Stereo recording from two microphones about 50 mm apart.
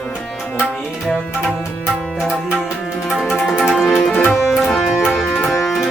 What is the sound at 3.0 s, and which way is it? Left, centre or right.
Music, centre.